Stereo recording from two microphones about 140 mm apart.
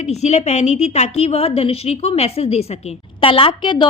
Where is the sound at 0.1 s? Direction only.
50° left (ahead or behind).